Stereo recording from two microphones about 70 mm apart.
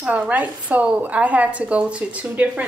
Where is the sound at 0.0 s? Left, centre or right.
Right.